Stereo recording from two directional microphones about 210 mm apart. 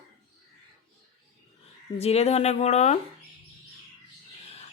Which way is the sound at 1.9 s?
30° left (ahead or behind).